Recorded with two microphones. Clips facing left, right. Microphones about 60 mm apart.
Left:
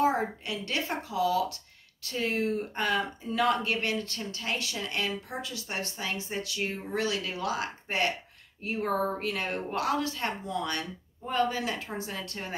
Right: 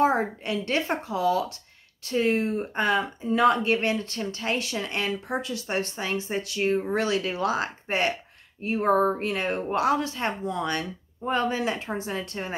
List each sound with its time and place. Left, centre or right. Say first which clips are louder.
0.0 s a woman's voice: right 4 dB; right